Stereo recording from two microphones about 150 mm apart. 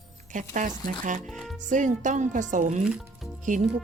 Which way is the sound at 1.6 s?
55° right (ahead or behind).